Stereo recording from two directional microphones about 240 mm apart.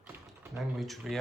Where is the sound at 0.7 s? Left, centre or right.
Centre.